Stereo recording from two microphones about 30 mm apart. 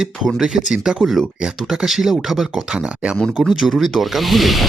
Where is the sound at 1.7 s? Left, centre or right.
Centre.